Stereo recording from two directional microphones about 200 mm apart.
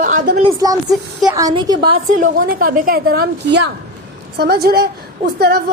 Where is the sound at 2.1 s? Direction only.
45° right (ahead or behind).